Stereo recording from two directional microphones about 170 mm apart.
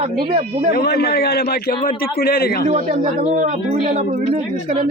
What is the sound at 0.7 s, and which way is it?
A man's voice, 70° left (ahead or behind).